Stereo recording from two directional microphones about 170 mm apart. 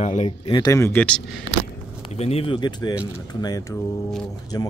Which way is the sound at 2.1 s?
35° left (ahead or behind).